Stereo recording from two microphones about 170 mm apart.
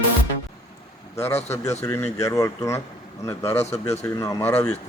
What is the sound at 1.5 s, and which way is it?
Speech, 15° left (ahead or behind).